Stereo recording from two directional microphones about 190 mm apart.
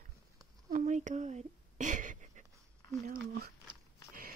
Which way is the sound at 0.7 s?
40° right (ahead or behind).